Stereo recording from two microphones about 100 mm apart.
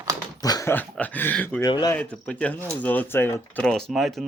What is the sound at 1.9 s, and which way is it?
Speech, 10° left (ahead or behind).